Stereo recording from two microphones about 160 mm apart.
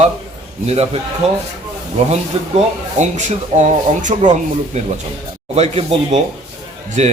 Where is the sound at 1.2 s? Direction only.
40° right (ahead or behind).